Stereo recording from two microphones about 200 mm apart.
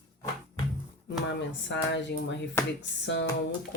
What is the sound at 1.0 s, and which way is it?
Speech, 60° left (ahead or behind).